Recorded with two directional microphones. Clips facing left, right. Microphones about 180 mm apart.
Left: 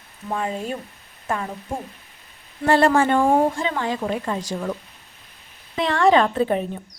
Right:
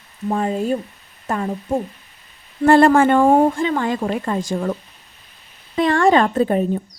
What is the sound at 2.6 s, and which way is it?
A woman's voice, 50° right (ahead or behind).